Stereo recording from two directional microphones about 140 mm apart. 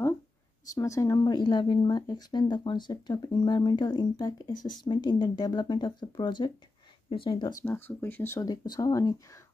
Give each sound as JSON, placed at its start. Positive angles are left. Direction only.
{"t": 0.7, "sound": "speech", "side_deg": 20}
{"t": 7.6, "sound": "speech", "side_deg": 15}
{"t": 8.5, "sound": "speech", "side_deg": 30}